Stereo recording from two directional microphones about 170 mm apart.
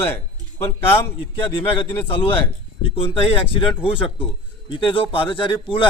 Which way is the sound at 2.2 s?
30° left (ahead or behind).